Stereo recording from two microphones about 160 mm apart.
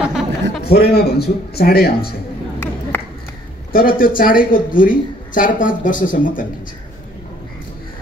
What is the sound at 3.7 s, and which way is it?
Speech, 65° left (ahead or behind).